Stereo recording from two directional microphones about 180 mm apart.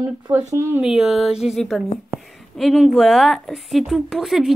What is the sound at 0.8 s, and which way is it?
A woman's voice, 5° right (ahead or behind).